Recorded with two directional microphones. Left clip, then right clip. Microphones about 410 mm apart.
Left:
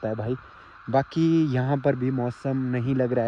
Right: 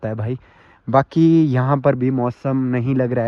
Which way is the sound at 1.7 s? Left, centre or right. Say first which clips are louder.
Right 8 dB; right.